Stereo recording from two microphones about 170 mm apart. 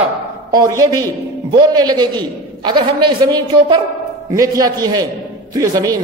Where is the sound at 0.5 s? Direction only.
20° right (ahead or behind).